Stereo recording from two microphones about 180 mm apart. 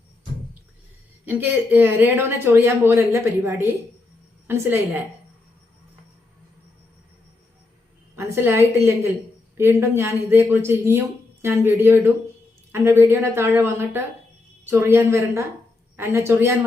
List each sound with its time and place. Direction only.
1.2 s speech: 10° right (ahead or behind)
8.1 s a woman's voice: 15° right (ahead or behind)